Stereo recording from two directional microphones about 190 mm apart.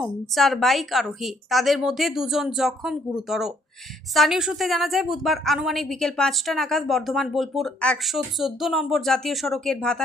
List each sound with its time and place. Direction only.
0.0 s a woman's voice: centre (ahead or behind)